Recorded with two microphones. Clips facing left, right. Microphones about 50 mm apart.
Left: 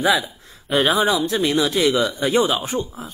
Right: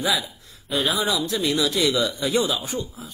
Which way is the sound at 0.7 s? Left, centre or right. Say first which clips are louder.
Left 6 dB; left.